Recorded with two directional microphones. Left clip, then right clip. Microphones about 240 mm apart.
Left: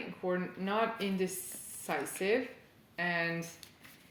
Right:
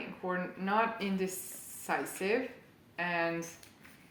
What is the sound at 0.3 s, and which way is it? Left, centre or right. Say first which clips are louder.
Speech: right 1 dB; left.